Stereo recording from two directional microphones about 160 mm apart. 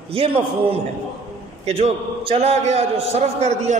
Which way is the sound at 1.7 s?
40° right (ahead or behind).